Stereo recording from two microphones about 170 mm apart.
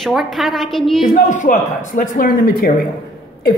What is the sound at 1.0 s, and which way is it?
Speech, 45° left (ahead or behind).